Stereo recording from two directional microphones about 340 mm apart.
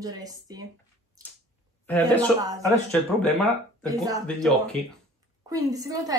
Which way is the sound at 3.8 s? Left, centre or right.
Centre.